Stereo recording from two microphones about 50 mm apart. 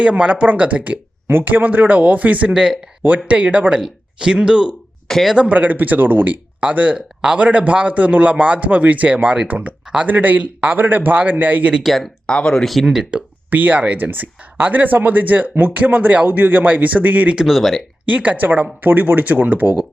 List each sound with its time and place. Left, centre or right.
0.0 s a man's voice: right
1.3 s speech: right
2.5 s speech: centre
3.2 s a man's voice: right
3.8 s speech: centre
5.0 s speech: centre
5.4 s speech: right
6.6 s a man's voice: right
11.8 s speech: centre
12.2 s speech: centre
12.6 s speech: centre
13.1 s a man's voice: right
17.4 s speech: centre
18.0 s speech: right